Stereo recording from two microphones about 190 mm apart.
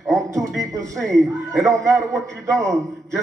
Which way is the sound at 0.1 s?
15° right (ahead or behind).